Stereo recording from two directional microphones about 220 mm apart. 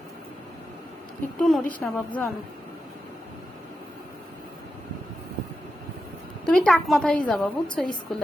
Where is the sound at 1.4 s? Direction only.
Centre (ahead or behind).